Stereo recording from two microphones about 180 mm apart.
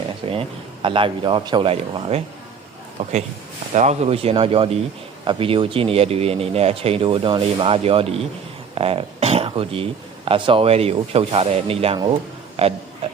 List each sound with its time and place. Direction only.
0.3 s a man's voice: 30° right (ahead or behind)